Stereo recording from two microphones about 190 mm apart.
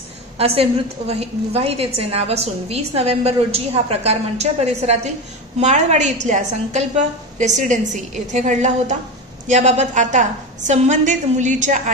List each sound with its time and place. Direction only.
0.4 s a woman's voice: 30° right (ahead or behind)